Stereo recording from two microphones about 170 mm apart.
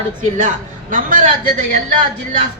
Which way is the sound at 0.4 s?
50° right (ahead or behind).